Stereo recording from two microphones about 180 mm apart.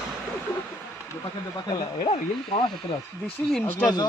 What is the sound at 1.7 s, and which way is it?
Speech, 25° left (ahead or behind).